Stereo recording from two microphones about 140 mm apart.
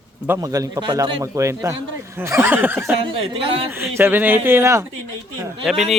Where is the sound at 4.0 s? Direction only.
15° right (ahead or behind).